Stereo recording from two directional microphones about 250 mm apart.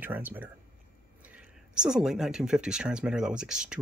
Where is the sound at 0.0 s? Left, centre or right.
Centre.